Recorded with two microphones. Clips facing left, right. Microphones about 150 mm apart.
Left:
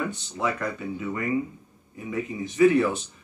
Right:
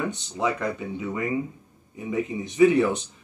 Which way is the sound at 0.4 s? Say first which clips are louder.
Right 2 dB; 20° right (ahead or behind).